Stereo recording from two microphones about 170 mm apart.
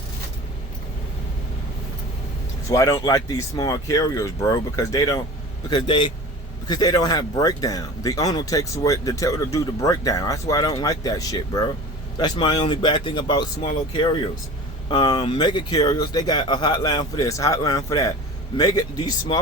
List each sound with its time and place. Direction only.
2.6 s speech: 20° left (ahead or behind)